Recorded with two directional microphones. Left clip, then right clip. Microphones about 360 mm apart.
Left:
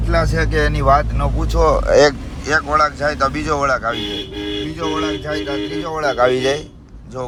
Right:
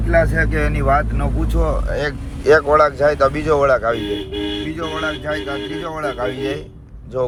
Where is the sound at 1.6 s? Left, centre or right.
Left.